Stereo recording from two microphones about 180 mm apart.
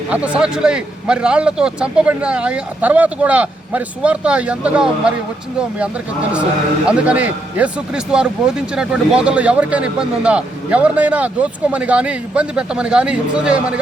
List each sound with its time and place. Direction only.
0.1 s a man's voice: 5° right (ahead or behind)
6.8 s a man's voice: 5° right (ahead or behind)